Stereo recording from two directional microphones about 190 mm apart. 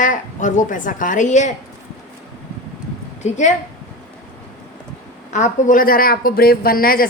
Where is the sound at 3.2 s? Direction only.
40° left (ahead or behind).